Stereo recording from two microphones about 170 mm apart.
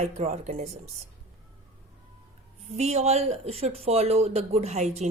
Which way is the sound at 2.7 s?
40° right (ahead or behind).